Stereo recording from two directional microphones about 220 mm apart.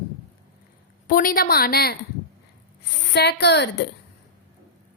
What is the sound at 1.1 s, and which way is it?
Speech, 40° left (ahead or behind).